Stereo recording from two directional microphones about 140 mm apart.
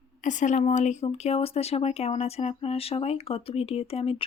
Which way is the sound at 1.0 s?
45° left (ahead or behind).